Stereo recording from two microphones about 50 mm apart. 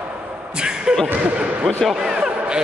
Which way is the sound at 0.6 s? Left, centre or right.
Centre.